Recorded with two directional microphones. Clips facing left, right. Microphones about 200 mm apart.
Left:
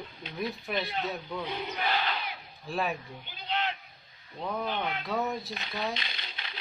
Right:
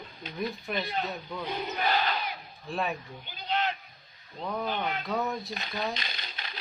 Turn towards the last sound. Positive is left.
turn(degrees=-45)  # may be behind; listen again after turning